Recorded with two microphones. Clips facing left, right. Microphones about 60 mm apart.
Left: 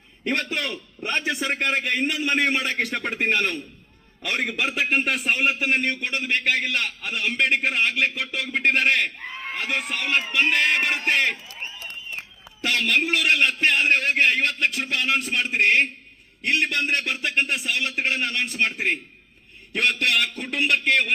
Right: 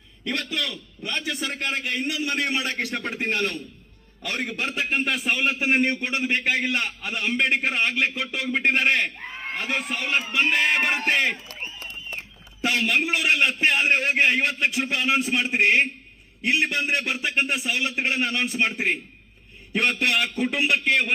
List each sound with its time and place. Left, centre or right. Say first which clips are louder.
0.3 s a man's voice: left 3 dB; left
3.0 s a man's voice: left 3 dB; left
4.6 s a man's voice: left 2 dB; left
5.5 s a man's voice: right 1 dB; centre
12.6 s a man's voice: even; centre